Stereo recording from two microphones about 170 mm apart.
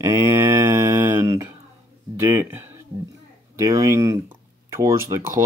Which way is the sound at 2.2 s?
15° right (ahead or behind).